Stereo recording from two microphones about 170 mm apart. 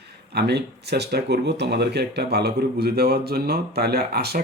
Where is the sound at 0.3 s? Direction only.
75° right (ahead or behind).